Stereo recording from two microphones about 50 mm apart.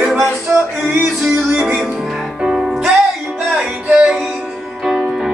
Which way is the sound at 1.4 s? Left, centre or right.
Centre.